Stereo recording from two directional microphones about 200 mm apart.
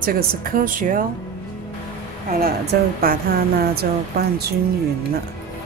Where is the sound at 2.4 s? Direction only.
50° right (ahead or behind).